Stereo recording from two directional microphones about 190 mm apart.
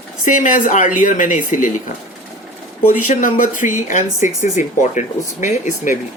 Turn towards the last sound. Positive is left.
turn(degrees=40)  # may be behind; listen again after turning